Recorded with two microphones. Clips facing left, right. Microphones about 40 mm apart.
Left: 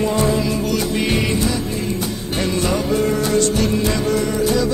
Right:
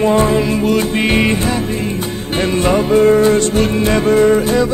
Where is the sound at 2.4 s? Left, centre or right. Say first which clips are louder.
Right 6 dB; right.